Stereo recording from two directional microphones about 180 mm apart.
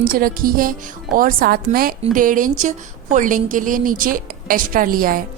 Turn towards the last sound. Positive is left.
turn(degrees=-50)  # may be behind; listen again after turning